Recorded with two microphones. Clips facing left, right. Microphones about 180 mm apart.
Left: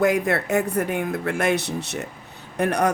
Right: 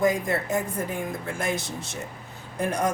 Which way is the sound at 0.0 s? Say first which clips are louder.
Left 3 dB; 70° left (ahead or behind).